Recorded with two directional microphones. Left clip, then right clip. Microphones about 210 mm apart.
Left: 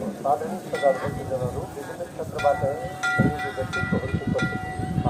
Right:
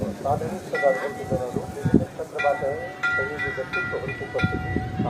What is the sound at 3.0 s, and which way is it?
Train, 55° left (ahead or behind).